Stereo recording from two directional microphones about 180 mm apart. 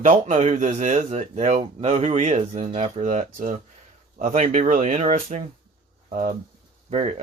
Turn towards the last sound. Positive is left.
turn(degrees=-40)  # may be behind; listen again after turning